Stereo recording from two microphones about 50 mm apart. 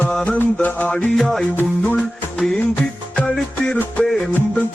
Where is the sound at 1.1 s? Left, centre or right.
Centre.